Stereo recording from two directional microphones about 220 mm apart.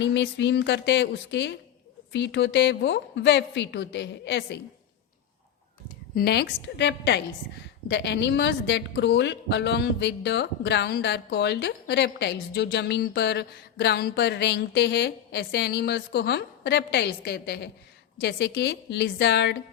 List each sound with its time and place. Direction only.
0.0 s a woman's voice: 55° left (ahead or behind)
6.1 s a woman's voice: 45° left (ahead or behind)